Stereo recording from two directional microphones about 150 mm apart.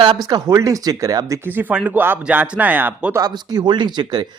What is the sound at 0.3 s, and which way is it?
Speech, 25° right (ahead or behind).